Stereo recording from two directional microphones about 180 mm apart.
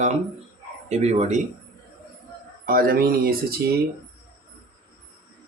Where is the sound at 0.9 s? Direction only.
40° right (ahead or behind).